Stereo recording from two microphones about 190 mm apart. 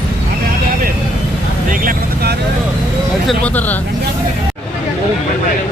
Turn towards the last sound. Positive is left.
turn(degrees=10)  # may be behind; listen again after turning